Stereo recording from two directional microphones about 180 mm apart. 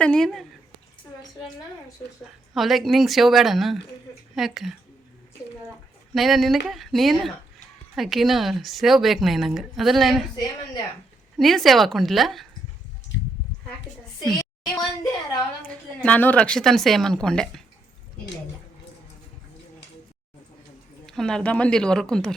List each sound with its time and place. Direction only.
0.0 s speech: 5° left (ahead or behind)
2.6 s speech: centre (ahead or behind)
6.1 s speech: centre (ahead or behind)
11.3 s speech: centre (ahead or behind)
14.3 s a sound: 25° left (ahead or behind)
16.0 s speech: 10° left (ahead or behind)
21.1 s speech: 5° left (ahead or behind)